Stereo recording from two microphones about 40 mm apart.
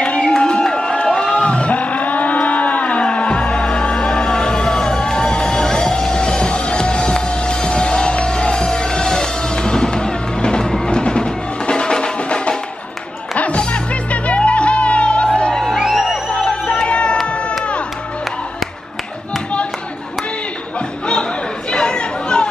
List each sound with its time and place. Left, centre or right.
0.0 s crowd: left
0.3 s crowd: left
1.3 s cattle: left
10.9 s music: left
15.9 s music: centre
16.3 s music: left
16.8 s a sound: left
17.3 s crowd: left
21.1 s chatter: left